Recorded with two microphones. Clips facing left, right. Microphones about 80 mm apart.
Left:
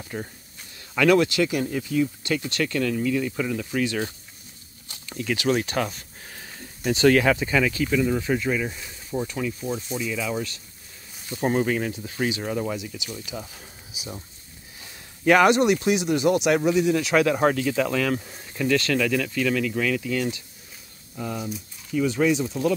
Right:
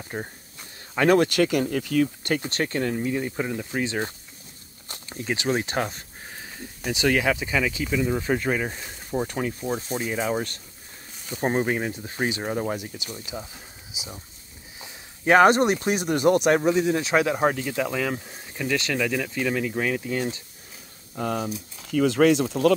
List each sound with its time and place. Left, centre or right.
0.1 s speech: right
2.2 s speech: right
6.8 s speech: centre
8.2 s speech: right
11.4 s speech: right
13.1 s speech: right
21.1 s speech: right
22.0 s speech: right